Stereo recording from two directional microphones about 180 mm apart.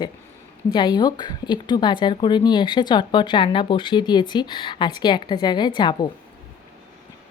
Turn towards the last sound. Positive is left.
turn(degrees=25)  # may be behind; listen again after turning